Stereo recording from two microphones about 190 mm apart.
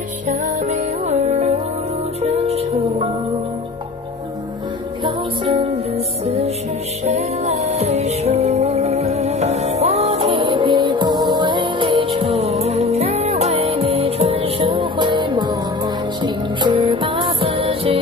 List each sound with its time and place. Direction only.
0.3 s music: 35° right (ahead or behind)
5.0 s music: 30° right (ahead or behind)